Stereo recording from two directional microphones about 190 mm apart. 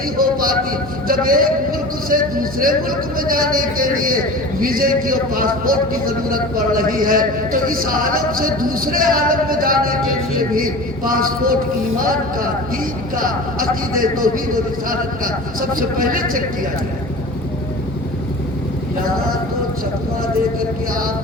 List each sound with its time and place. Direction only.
0.2 s a man's voice: 50° right (ahead or behind)